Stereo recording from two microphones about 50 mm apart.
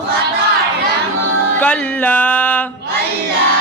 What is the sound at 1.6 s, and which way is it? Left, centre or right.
A man's voice, left.